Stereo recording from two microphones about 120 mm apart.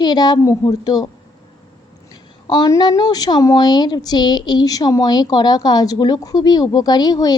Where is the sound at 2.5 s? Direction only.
35° left (ahead or behind).